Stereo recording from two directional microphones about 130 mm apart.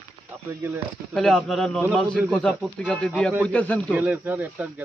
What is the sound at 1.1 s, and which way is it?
Speech, 5° left (ahead or behind).